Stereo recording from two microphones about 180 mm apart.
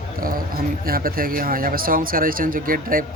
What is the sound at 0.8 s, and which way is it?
Speech, 55° right (ahead or behind).